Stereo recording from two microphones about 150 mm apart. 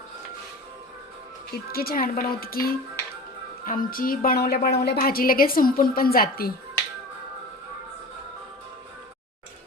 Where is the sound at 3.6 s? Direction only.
65° left (ahead or behind); by 6.5 s 85° left.